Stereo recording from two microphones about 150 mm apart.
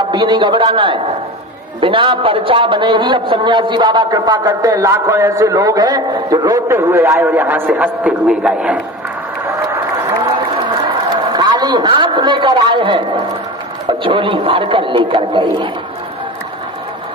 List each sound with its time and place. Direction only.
0.0 s a man's voice: 30° right (ahead or behind); by 8.8 s 5° right (ahead or behind)
10.8 s a sound: 30° right (ahead or behind)
13.8 s a man's voice: 35° right (ahead or behind)